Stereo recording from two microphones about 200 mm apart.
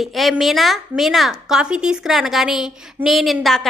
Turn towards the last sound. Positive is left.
turn(degrees=0)  # may be behind; listen again after turning